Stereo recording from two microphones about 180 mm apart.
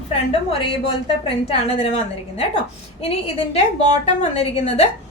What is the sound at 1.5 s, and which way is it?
Speech, 35° left (ahead or behind).